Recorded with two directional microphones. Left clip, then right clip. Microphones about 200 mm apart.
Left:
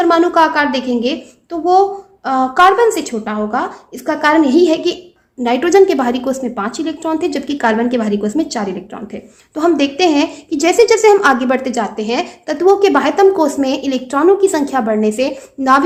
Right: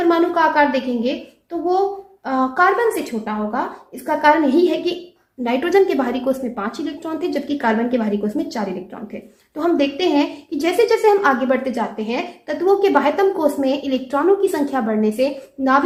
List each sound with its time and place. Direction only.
0.0 s a woman's voice: 50° left (ahead or behind)